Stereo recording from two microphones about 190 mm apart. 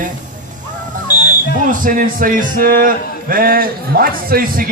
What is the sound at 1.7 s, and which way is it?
A man's voice, 45° right (ahead or behind).